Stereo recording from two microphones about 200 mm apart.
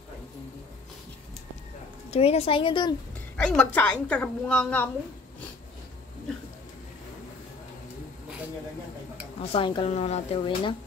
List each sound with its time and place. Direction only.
2.0 s speech: 30° left (ahead or behind)
3.3 s a woman's voice: 5° left (ahead or behind)
9.4 s speech: 25° left (ahead or behind)